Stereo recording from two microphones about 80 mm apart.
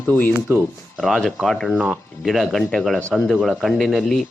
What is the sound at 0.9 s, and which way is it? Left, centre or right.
Speech, centre.